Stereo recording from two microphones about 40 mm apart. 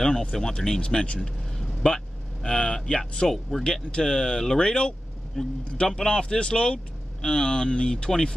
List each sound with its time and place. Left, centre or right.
0.0 s a man's voice: centre